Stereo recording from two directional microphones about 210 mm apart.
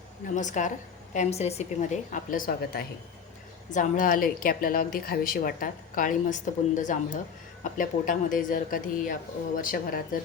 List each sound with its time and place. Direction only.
0.3 s a woman's voice: 35° left (ahead or behind)